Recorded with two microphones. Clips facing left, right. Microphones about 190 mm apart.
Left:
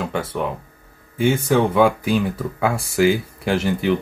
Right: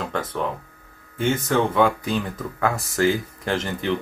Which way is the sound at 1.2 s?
10° left (ahead or behind).